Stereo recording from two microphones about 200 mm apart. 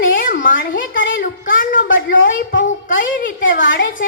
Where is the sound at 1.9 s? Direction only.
70° left (ahead or behind).